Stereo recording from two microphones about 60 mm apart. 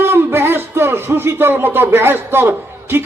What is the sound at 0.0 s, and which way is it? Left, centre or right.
Speech, right.